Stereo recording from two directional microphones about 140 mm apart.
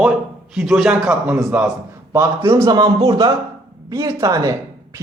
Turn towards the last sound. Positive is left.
turn(degrees=-25)  # may be behind; listen again after turning